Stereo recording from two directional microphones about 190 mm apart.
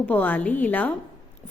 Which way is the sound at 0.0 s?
10° left (ahead or behind).